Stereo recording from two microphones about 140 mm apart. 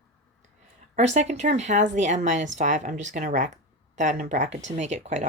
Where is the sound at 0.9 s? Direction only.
50° right (ahead or behind).